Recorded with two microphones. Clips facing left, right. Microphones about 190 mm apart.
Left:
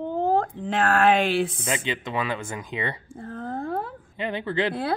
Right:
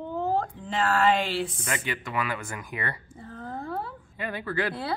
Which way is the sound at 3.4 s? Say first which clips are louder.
Left 4 dB; 45° left (ahead or behind).